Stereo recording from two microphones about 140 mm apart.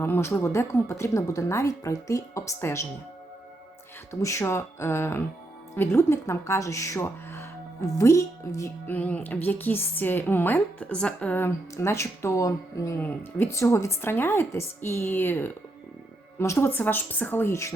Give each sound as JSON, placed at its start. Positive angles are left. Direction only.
{"t": 0.0, "sound": "a woman's voice", "side_deg": 15}
{"t": 4.1, "sound": "a woman's voice", "side_deg": 20}
{"t": 9.0, "sound": "a woman's voice", "side_deg": 10}